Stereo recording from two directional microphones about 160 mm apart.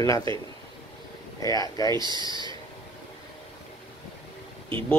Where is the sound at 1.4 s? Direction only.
20° left (ahead or behind).